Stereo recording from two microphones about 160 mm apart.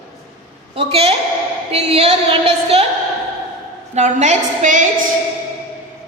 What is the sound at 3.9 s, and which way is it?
Speech, 45° right (ahead or behind).